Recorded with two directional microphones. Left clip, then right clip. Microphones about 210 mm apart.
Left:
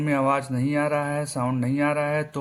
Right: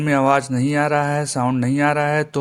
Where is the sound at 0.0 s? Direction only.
35° right (ahead or behind).